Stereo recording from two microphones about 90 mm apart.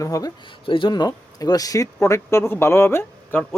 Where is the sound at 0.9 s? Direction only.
50° left (ahead or behind).